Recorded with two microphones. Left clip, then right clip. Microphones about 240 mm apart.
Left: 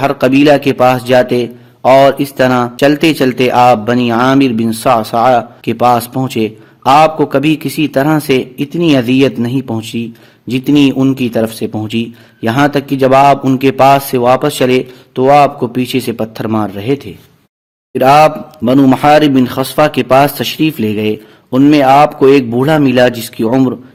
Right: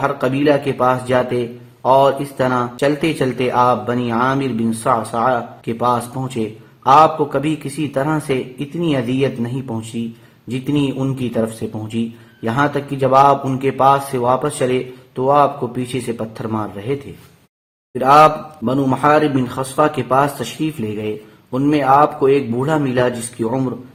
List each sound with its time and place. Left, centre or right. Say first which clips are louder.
0.0 s speech: left 8 dB; left